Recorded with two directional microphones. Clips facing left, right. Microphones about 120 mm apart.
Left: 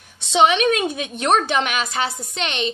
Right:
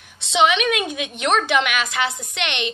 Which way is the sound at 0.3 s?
40° left (ahead or behind).